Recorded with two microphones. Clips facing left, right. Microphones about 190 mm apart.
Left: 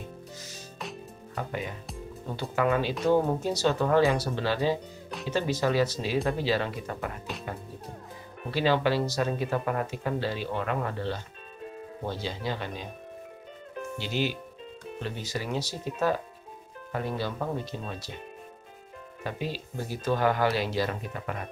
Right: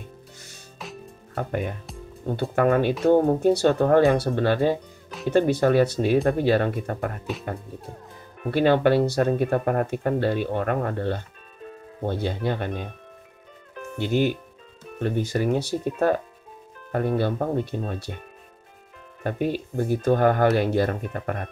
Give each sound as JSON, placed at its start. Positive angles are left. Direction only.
{"t": 1.3, "sound": "speech", "side_deg": -55}
{"t": 8.5, "sound": "speech", "side_deg": -55}
{"t": 13.9, "sound": "speech", "side_deg": -55}
{"t": 19.2, "sound": "speech", "side_deg": -55}